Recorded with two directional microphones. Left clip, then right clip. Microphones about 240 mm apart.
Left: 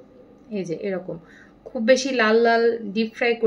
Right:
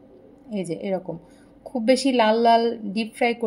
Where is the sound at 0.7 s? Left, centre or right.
Right.